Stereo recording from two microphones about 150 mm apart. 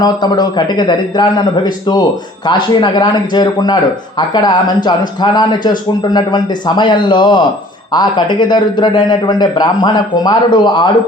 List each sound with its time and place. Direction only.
0.0 s speech: 25° left (ahead or behind)